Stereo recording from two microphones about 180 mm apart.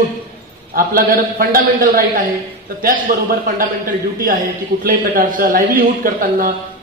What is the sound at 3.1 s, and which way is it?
Speech, 50° right (ahead or behind).